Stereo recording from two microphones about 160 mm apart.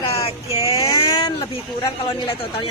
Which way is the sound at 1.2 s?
25° left (ahead or behind).